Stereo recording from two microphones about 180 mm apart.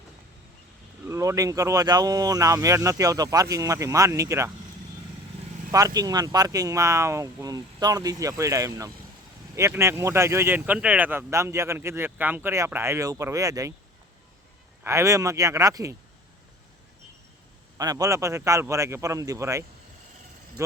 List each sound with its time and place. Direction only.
1.0 s speech: 15° right (ahead or behind)
5.7 s speech: 20° right (ahead or behind)
14.8 s speech: 15° right (ahead or behind)
17.7 s speech: 20° right (ahead or behind)